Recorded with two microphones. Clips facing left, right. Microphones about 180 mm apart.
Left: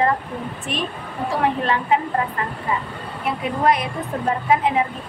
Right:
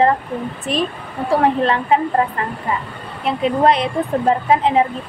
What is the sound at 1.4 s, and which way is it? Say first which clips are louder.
Speech: right 2 dB; 35° right (ahead or behind).